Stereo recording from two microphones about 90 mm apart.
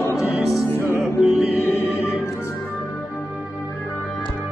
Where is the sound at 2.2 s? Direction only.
35° left (ahead or behind).